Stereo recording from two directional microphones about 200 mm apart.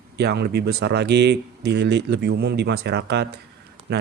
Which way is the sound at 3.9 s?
55° right (ahead or behind).